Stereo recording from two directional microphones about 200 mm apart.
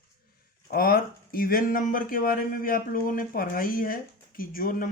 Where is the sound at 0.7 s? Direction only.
45° left (ahead or behind).